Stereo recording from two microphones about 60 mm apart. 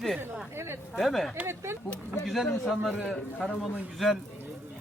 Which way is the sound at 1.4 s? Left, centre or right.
Right.